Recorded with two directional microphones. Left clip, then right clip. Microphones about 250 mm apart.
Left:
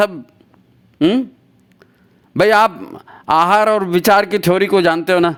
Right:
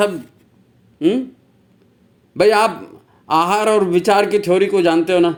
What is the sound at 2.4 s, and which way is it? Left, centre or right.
A man's voice, left.